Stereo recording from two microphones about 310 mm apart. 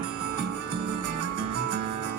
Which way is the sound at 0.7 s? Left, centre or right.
Right.